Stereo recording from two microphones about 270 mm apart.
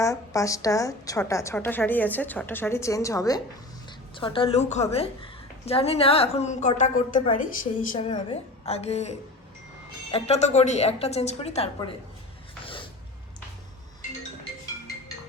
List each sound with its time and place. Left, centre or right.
0.0 s a woman's voice: centre